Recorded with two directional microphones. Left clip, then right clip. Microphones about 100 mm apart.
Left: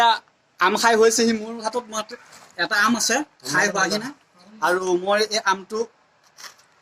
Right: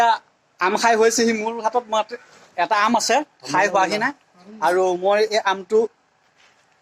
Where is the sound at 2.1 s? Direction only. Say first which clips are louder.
Right 5 dB; 30° right (ahead or behind).